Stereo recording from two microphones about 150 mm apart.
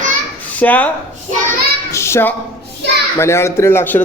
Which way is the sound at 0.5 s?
10° left (ahead or behind).